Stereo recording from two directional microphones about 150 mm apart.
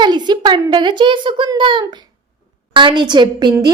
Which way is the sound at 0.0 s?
30° right (ahead or behind).